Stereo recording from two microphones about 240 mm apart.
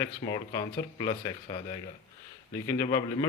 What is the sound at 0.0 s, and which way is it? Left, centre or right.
A man's voice, centre.